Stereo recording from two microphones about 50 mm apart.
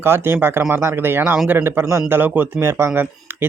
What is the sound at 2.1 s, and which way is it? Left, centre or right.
Speech, right.